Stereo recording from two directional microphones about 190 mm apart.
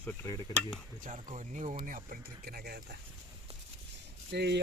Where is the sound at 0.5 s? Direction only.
20° left (ahead or behind).